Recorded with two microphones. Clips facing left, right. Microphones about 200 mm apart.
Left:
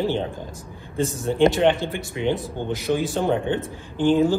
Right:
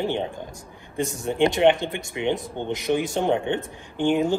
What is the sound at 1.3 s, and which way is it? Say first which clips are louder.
Speech: left 1 dB; 15° right (ahead or behind).